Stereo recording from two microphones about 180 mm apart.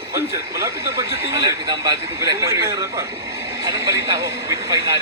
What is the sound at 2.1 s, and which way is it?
Speech, 15° right (ahead or behind).